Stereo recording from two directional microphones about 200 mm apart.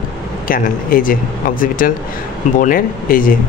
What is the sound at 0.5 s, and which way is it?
Speech, 45° left (ahead or behind).